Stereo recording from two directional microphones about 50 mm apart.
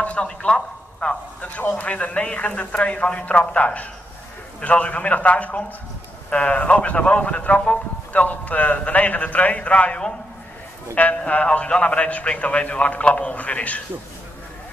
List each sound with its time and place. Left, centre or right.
0.0 s a man's voice: left
11.1 s a man's voice: left